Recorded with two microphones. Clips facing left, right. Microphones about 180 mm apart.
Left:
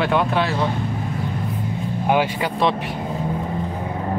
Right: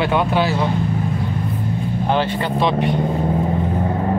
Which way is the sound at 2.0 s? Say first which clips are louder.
Left 1 dB; 10° left (ahead or behind).